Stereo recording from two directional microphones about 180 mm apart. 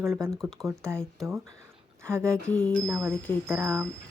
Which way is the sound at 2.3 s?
5° left (ahead or behind).